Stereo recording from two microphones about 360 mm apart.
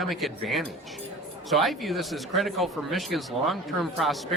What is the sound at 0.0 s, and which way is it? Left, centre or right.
Speech, centre.